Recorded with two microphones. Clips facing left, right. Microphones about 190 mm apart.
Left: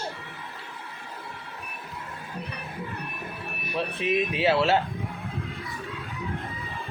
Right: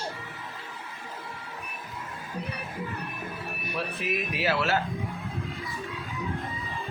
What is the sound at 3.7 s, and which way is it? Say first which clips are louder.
Speech: left 6 dB; 25° left (ahead or behind).